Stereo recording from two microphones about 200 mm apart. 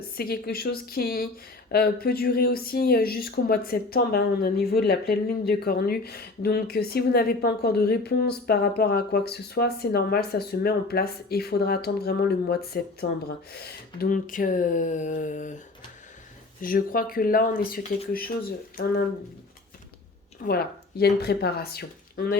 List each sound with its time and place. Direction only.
0.0 s speech: 50° left (ahead or behind)
20.4 s speech: 50° left (ahead or behind)